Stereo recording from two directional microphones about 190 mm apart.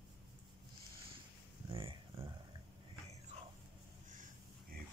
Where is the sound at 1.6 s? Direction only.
30° right (ahead or behind).